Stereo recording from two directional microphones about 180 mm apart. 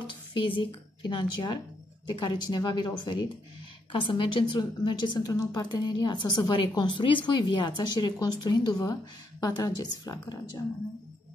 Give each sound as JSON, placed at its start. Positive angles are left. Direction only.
{"t": 0.0, "sound": "a woman's voice", "side_deg": 30}